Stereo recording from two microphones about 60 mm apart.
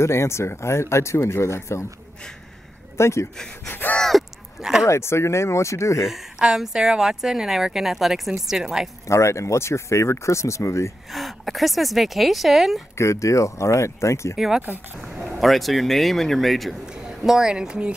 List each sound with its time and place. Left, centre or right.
0.0 s speech: left
3.0 s speech: left
3.6 s gasp: left
4.1 s a sound: centre
4.6 s speech: centre
4.8 s speech: left
6.4 s speech: centre
9.0 s speech: left
11.1 s speech: centre
12.9 s speech: left
14.3 s speech: centre